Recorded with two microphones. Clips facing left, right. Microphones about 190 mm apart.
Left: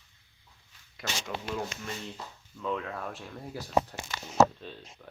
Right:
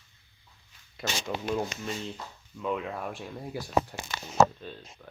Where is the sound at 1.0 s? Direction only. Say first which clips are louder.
Right 3 dB; 25° right (ahead or behind).